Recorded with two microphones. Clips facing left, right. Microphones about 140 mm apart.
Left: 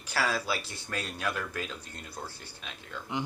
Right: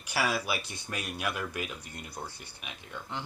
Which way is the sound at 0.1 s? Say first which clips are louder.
Even; 15° right (ahead or behind).